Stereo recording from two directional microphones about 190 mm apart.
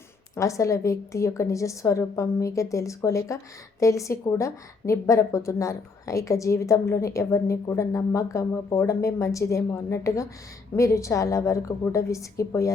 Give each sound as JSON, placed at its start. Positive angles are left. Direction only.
{"t": 0.3, "sound": "a woman's voice", "side_deg": 15}